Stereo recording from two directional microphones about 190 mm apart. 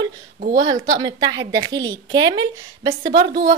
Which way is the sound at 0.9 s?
20° right (ahead or behind).